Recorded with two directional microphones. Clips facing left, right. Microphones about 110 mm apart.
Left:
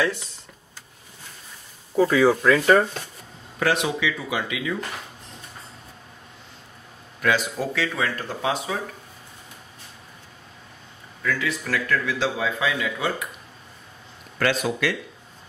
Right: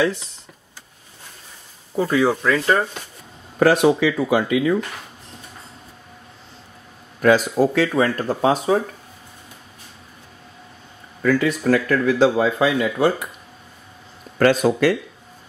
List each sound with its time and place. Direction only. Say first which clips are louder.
2.4 s speech: left 2 dB; 5° left (ahead or behind)
3.5 s speech: right 8 dB; 45° right (ahead or behind)
7.2 s speech: right 8 dB; 45° right (ahead or behind)
11.2 s speech: right 9 dB; 45° right (ahead or behind)
14.4 s speech: right 8 dB; 45° right (ahead or behind)